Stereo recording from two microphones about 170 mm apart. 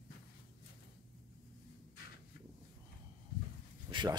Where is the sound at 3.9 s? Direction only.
25° right (ahead or behind).